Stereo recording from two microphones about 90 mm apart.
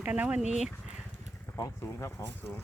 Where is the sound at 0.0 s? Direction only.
15° right (ahead or behind).